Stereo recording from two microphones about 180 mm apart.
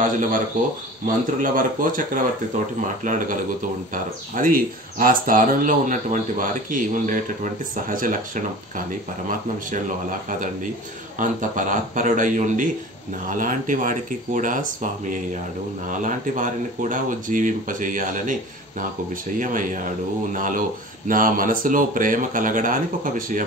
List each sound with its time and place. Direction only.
1.0 s speech: 50° right (ahead or behind)
11.1 s speech: 45° right (ahead or behind)
19.3 s speech: 45° right (ahead or behind)